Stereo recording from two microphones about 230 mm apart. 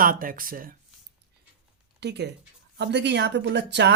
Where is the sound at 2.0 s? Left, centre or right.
Right.